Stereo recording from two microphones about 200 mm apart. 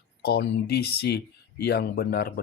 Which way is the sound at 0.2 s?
50° left (ahead or behind).